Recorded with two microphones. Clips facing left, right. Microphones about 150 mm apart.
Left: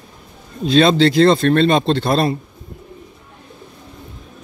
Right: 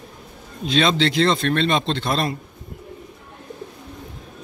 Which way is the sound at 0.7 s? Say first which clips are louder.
Left 7 dB; 35° left (ahead or behind).